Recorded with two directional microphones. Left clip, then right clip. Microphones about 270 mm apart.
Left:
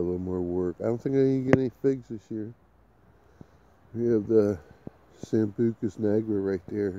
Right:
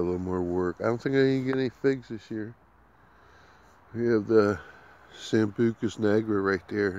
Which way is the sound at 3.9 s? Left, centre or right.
Centre.